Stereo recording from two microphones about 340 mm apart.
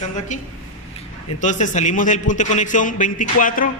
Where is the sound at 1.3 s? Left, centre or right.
Left.